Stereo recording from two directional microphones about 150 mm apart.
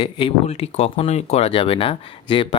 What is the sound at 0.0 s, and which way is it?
Speech, 35° left (ahead or behind).